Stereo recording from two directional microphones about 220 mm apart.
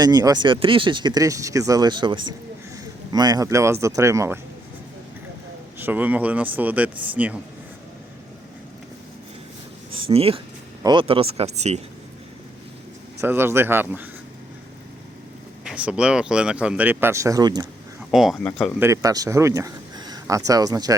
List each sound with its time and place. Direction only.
0.0 s speech: 15° right (ahead or behind)
5.8 s speech: 5° right (ahead or behind)
10.1 s speech: 25° right (ahead or behind)
13.2 s speech: 10° right (ahead or behind)
15.6 s speech: 5° right (ahead or behind)
18.1 s speech: centre (ahead or behind)
18.8 s speech: 15° right (ahead or behind)